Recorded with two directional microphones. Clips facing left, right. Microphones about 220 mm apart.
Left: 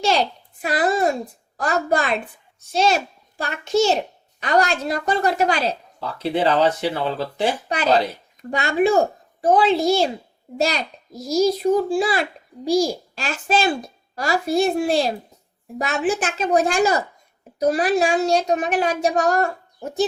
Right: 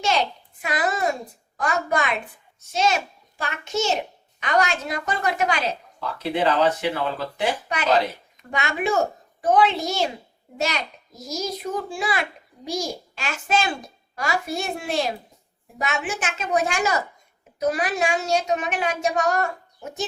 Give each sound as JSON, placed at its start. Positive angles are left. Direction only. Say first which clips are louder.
{"t": 0.0, "sound": "a child's voice", "louder": "left 3 dB", "side_deg": 35}